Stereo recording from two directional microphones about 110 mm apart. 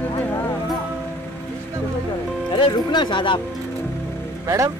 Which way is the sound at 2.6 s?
45° left (ahead or behind).